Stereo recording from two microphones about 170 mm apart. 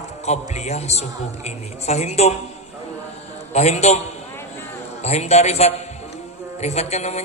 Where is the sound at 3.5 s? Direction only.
40° left (ahead or behind).